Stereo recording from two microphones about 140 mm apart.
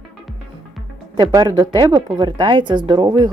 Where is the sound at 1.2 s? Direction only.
30° right (ahead or behind).